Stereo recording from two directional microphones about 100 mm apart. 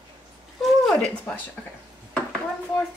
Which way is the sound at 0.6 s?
5° left (ahead or behind).